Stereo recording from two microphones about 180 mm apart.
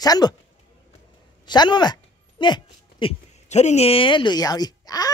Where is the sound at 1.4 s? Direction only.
25° left (ahead or behind).